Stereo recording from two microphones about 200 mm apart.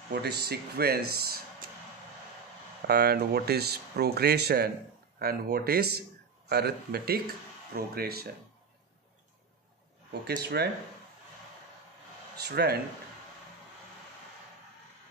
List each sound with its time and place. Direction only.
0.1 s speech: 55° right (ahead or behind)
2.9 s speech: 50° right (ahead or behind)
10.2 s speech: 55° right (ahead or behind)
12.4 s speech: 55° right (ahead or behind)